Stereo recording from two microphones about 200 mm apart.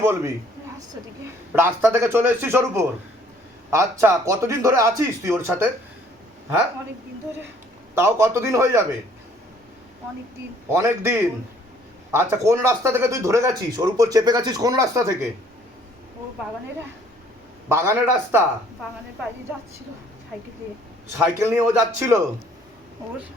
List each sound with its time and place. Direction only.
0.0 s a man's voice: 15° right (ahead or behind)
1.5 s speech: 10° right (ahead or behind)
7.9 s speech: 15° right (ahead or behind)
10.7 s speech: 15° right (ahead or behind)
17.7 s speech: 10° right (ahead or behind)
21.2 s speech: 10° right (ahead or behind)